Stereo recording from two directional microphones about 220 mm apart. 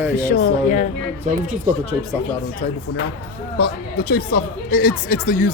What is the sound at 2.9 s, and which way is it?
Speech, 90° left.